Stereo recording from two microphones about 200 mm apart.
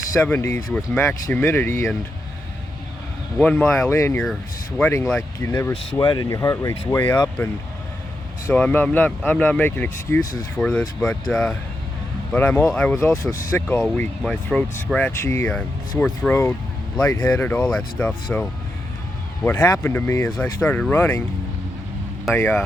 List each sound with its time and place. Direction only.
0.1 s speech: 10° left (ahead or behind)
3.3 s speech: 5° left (ahead or behind)
19.5 s speech: 15° left (ahead or behind)
22.4 s speech: 10° left (ahead or behind)